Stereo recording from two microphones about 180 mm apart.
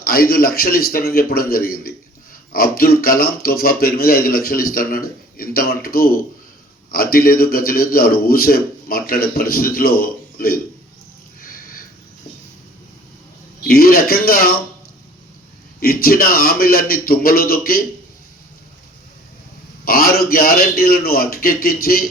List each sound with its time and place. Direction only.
0.0 s speech: 55° left (ahead or behind)
11.3 s a sound: 50° left (ahead or behind)
13.7 s speech: 55° left (ahead or behind)
15.8 s speech: 55° left (ahead or behind)
19.8 s speech: 55° left (ahead or behind)